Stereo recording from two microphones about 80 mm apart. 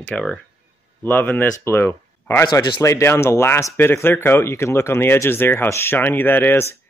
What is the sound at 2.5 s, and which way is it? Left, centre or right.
Speech, left.